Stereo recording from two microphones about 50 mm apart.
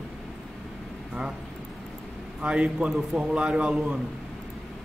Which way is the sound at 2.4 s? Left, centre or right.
Right.